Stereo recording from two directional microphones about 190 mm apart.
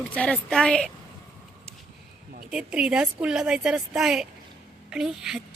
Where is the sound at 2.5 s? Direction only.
5° right (ahead or behind).